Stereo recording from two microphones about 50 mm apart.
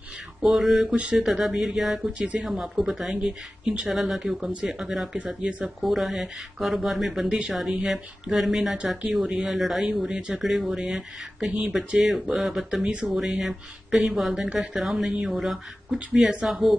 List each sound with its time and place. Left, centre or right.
0.4 s speech: centre
0.9 s speech: right
1.2 s speech: centre
3.2 s speech: centre
5.1 s speech: centre
5.8 s speech: centre
9.8 s speech: right
10.2 s speech: centre